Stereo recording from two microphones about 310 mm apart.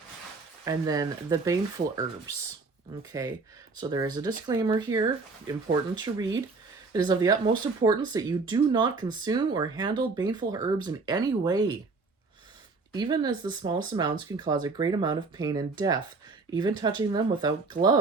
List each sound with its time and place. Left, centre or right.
0.6 s speech: centre
3.1 s speech: centre
12.9 s speech: centre